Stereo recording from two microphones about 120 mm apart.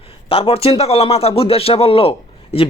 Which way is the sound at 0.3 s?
50° left (ahead or behind).